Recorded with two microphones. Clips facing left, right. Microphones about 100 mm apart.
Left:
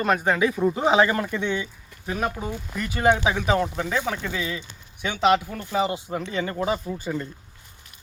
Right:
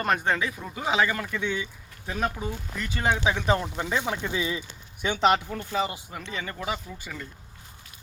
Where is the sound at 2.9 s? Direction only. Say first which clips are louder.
Left 5 dB; 10° left (ahead or behind); by 4.1 s 5° right (ahead or behind).